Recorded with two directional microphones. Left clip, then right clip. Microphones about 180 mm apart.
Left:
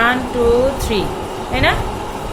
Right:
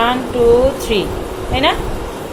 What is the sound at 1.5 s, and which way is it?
Speech, 15° right (ahead or behind).